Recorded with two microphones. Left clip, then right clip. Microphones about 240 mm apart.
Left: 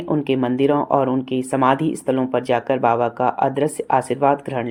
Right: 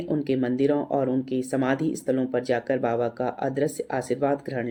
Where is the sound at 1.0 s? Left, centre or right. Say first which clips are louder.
Left 6 dB; centre.